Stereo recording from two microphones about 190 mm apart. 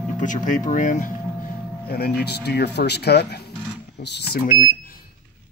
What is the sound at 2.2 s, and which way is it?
Speech, 60° left (ahead or behind).